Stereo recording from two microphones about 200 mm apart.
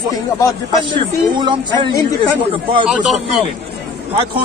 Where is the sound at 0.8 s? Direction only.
25° right (ahead or behind).